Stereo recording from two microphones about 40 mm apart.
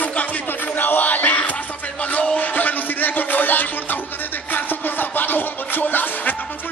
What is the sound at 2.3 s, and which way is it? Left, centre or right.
Music, left.